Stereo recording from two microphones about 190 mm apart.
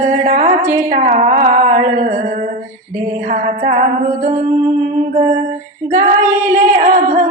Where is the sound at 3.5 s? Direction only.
40° right (ahead or behind).